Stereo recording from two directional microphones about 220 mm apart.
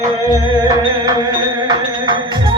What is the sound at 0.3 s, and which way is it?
Music, 15° right (ahead or behind).